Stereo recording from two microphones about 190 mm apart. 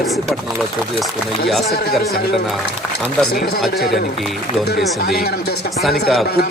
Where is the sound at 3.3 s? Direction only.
55° left (ahead or behind).